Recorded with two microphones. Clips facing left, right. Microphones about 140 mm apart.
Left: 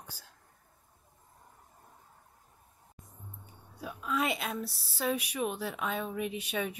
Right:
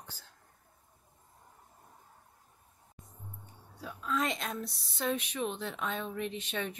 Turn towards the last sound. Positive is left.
turn(degrees=10)  # may be behind; listen again after turning